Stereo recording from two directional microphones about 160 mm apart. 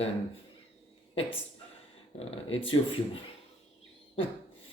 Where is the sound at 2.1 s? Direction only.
35° left (ahead or behind).